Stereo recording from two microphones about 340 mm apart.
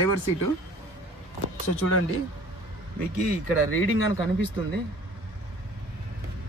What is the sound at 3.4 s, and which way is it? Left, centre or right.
Speech, left.